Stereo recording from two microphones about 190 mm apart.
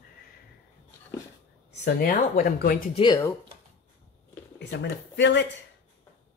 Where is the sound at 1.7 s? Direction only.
55° left (ahead or behind).